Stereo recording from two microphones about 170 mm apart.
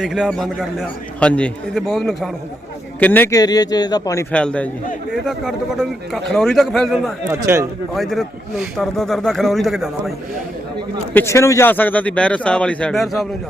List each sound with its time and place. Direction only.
0.0 s a man's voice: centre (ahead or behind)
3.0 s a man's voice: 10° left (ahead or behind)
4.3 s a man's voice: 5° left (ahead or behind)
7.3 s speech: 15° right (ahead or behind)
7.9 s a man's voice: centre (ahead or behind)
11.1 s speech: 15° left (ahead or behind)